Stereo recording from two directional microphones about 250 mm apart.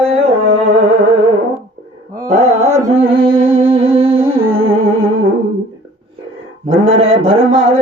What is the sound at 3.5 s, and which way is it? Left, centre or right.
Music, centre.